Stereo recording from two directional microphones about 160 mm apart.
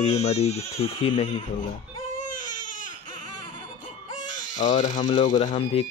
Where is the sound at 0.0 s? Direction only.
40° left (ahead or behind).